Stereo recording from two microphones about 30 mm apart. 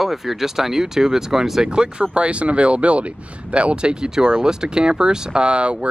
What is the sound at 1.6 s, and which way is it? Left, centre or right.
Speech, right.